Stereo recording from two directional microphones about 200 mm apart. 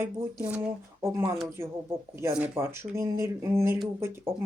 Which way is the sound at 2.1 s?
10° right (ahead or behind).